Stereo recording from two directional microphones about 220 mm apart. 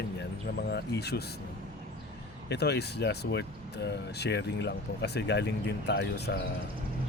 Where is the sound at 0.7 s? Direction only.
50° left (ahead or behind).